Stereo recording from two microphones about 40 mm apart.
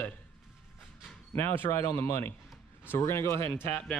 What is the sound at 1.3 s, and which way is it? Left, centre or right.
A man's voice, left.